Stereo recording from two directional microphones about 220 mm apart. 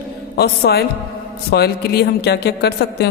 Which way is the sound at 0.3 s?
45° left (ahead or behind).